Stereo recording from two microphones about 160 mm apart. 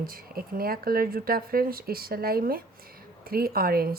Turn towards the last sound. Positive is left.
turn(degrees=-70)  # may be behind; listen again after turning